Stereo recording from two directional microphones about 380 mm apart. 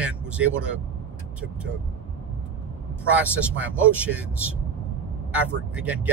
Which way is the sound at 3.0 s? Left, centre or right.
Centre.